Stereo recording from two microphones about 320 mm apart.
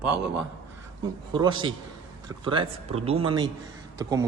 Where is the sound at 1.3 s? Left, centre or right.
Centre.